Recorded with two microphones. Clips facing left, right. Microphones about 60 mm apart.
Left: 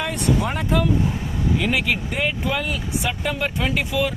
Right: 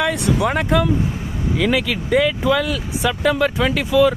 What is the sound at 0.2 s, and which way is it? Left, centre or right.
Speech, right.